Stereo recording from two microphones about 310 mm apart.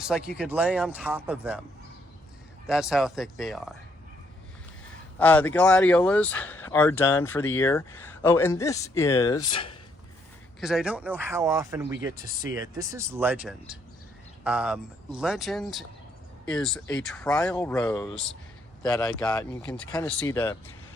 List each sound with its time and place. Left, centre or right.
0.3 s speech: centre
2.6 s speech: centre
5.2 s speech: centre
10.6 s speech: centre